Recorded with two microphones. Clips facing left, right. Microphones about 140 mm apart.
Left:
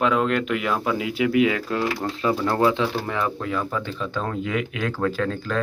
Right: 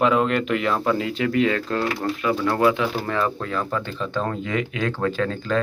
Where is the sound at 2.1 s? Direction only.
30° left (ahead or behind).